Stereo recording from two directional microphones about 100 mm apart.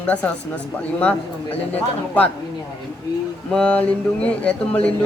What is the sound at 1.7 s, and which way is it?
Speech, 15° left (ahead or behind).